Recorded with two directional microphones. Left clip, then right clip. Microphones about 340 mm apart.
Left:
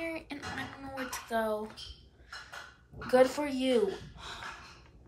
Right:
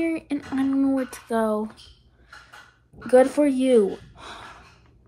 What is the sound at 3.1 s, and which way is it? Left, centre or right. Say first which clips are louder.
Speech: right 9 dB; centre.